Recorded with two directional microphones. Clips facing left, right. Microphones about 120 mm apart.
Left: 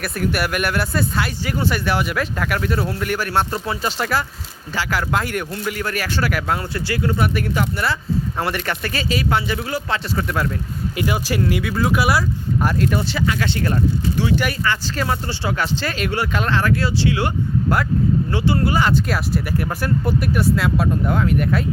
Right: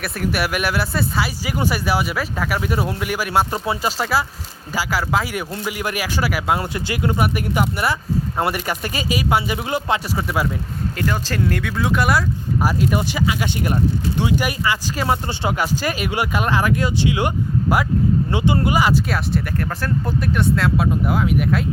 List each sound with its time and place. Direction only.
0.0 s speech: centre (ahead or behind); by 10.2 s 20° right (ahead or behind)
10.9 s speech: 10° left (ahead or behind)
12.6 s speech: 10° right (ahead or behind)
18.8 s speech: 5° right (ahead or behind)